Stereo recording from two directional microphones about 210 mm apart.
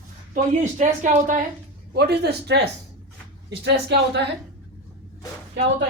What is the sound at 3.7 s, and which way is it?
Speech, 55° right (ahead or behind).